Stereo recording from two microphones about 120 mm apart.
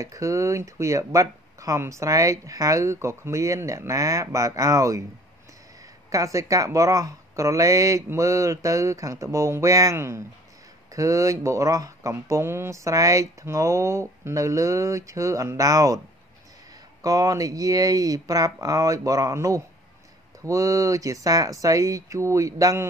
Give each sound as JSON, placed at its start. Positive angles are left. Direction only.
{"t": 0.0, "sound": "speech", "side_deg": -25}
{"t": 6.1, "sound": "speech", "side_deg": -25}
{"t": 17.0, "sound": "speech", "side_deg": -30}